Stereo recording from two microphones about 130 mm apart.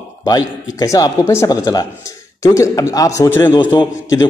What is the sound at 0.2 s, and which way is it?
A man's voice, 30° left (ahead or behind).